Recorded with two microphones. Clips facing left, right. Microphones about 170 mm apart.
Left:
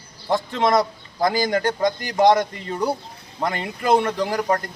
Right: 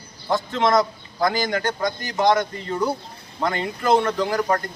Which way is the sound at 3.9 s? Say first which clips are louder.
Even; 10° left (ahead or behind).